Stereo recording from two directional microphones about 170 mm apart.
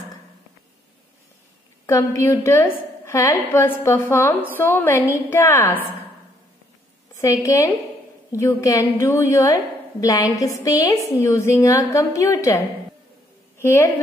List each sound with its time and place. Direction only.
1.9 s a woman's voice: 15° left (ahead or behind)
7.2 s a woman's voice: 20° left (ahead or behind)